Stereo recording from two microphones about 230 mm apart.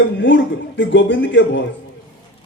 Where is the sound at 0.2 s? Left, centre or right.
Left.